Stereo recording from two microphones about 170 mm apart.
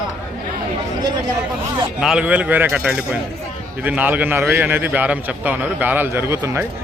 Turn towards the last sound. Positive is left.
turn(degrees=-15)  # may be behind; listen again after turning